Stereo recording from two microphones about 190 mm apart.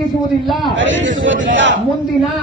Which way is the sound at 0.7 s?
80° right.